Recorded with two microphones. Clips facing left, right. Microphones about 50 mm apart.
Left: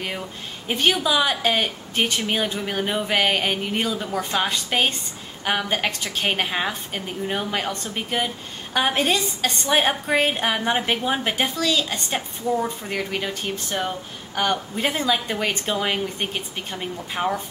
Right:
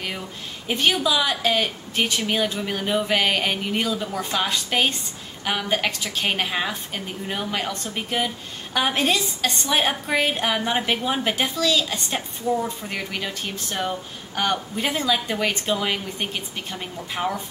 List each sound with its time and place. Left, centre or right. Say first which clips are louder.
0.7 s speech: even; centre
13.7 s speech: even; centre
14.5 s speech: left 1 dB; centre